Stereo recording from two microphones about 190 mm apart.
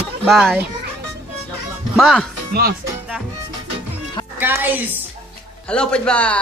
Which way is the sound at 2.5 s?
50° right (ahead or behind).